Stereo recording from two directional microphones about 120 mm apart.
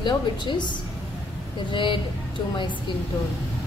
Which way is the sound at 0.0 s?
40° left (ahead or behind).